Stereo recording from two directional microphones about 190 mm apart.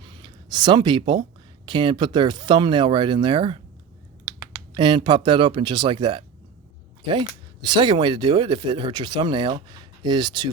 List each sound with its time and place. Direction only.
0.0 s speech: 25° right (ahead or behind)
4.7 s speech: 25° right (ahead or behind)